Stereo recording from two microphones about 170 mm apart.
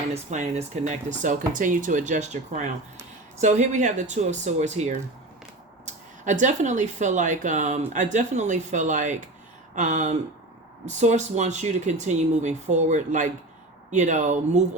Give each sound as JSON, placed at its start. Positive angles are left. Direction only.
{"t": 0.1, "sound": "speech", "side_deg": -40}